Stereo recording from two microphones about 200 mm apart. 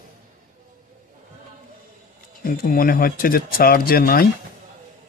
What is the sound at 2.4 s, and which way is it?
Speech, 45° left (ahead or behind).